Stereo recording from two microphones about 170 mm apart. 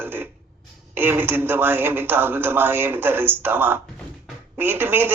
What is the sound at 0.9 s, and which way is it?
Speech, 10° right (ahead or behind).